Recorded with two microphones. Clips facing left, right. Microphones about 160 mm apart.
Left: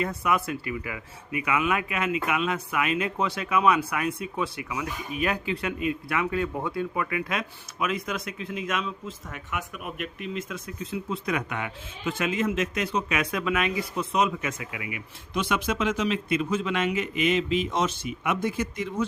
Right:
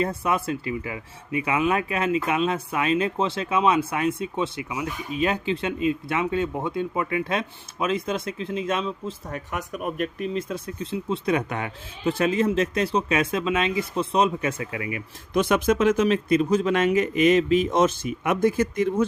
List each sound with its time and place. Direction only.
0.0 s speech: 30° right (ahead or behind); by 19.0 s 45° right (ahead or behind)